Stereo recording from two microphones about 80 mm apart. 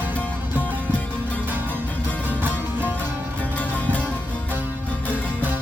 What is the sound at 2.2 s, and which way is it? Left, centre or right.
Music, right.